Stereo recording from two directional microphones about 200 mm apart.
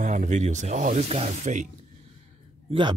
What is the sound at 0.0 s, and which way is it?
Speech, 40° right (ahead or behind).